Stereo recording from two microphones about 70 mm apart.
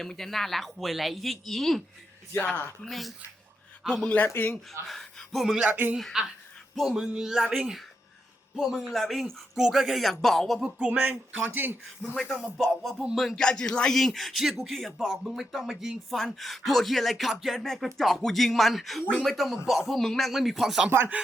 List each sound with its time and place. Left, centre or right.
0.0 s speech: centre
2.8 s speech: centre
4.4 s speech: left
4.9 s speech: centre
5.6 s speech: right
6.7 s speech: centre
10.8 s speech: right
12.7 s speech: centre